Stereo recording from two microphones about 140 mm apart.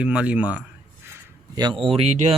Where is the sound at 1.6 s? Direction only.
30° right (ahead or behind).